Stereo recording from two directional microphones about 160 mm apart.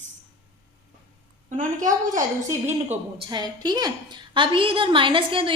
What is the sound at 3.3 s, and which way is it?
A woman's voice, 25° right (ahead or behind).